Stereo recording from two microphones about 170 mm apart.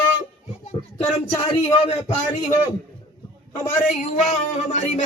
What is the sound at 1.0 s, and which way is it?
Speech, 10° left (ahead or behind).